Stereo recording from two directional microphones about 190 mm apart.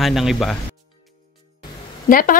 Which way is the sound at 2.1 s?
45° left (ahead or behind).